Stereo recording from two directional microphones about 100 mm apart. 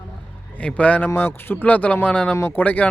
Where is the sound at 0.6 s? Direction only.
15° left (ahead or behind).